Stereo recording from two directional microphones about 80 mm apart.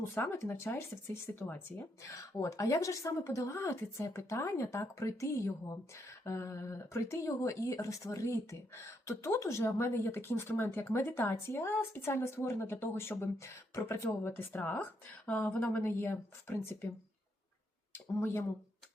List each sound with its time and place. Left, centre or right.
0.0 s speech: left
2.0 s speech: left
17.9 s speech: left